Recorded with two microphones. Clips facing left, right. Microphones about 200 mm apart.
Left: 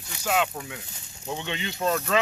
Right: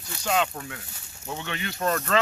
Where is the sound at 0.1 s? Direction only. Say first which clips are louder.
Even; 10° left (ahead or behind).